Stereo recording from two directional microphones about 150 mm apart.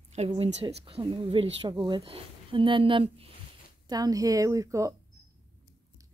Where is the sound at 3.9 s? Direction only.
25° right (ahead or behind).